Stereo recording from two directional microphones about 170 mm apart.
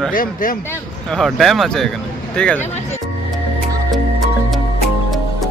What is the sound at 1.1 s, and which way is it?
Speech, centre (ahead or behind).